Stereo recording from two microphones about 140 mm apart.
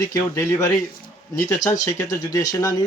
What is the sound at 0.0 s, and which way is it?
Speech, 20° left (ahead or behind).